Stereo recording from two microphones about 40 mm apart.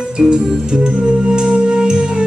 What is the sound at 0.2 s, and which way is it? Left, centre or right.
Music, centre.